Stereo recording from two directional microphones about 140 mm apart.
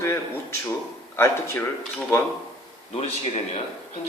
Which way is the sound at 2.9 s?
50° left (ahead or behind).